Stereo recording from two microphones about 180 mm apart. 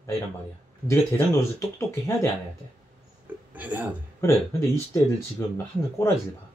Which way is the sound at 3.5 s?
10° right (ahead or behind).